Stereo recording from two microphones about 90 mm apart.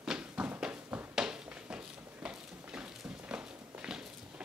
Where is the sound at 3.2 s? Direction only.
10° right (ahead or behind).